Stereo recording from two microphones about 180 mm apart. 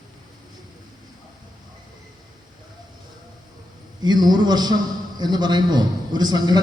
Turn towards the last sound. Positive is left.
turn(degrees=-20)  # may be behind; listen again after turning